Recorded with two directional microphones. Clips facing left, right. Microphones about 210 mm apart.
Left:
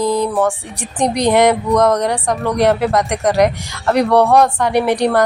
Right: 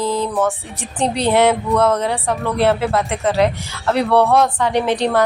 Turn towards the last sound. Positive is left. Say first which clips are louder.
# left 2 dB
turn(degrees=10)  # may be behind; listen again after turning